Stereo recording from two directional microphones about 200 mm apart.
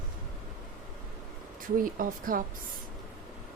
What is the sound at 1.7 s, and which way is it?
Speech, 45° right (ahead or behind).